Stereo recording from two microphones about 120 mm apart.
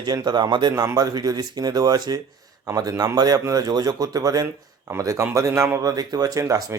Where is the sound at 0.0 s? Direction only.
35° right (ahead or behind).